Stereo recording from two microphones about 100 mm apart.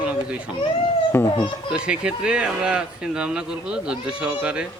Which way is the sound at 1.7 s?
10° right (ahead or behind).